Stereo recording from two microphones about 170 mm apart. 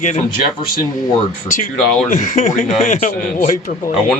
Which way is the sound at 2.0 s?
45° left (ahead or behind).